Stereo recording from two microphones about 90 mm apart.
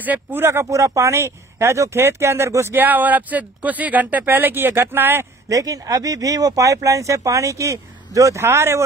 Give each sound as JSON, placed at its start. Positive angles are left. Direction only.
{"t": 0.0, "sound": "speech", "side_deg": -20}
{"t": 5.5, "sound": "speech", "side_deg": -40}